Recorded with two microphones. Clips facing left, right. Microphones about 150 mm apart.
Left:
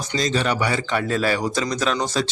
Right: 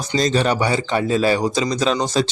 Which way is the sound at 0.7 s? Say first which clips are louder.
Right 4 dB; 20° right (ahead or behind).